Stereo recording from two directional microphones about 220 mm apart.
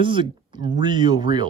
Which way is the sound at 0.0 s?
20° right (ahead or behind).